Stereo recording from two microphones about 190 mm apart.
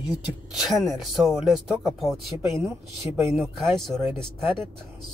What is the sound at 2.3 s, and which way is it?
Speech, 15° right (ahead or behind).